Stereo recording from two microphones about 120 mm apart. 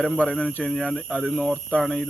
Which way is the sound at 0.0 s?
5° left (ahead or behind).